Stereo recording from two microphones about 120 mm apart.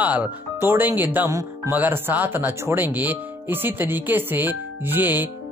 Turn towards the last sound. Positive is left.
turn(degrees=-15)  # may be behind; listen again after turning